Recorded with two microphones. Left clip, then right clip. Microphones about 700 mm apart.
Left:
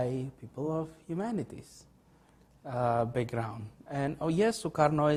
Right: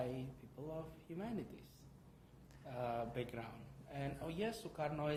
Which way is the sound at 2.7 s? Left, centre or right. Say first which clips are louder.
Left 13 dB; left.